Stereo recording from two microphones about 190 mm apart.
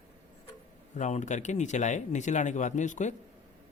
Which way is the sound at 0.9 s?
40° left (ahead or behind).